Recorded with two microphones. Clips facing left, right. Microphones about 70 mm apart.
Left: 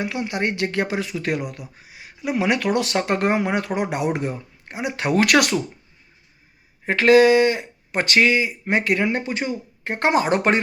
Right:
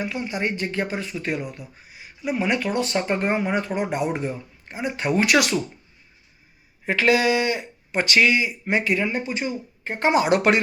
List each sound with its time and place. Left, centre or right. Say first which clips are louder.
0.0 s speech: left 2 dB; left
6.8 s speech: left 6 dB; left
10.2 s speech: right 1 dB; left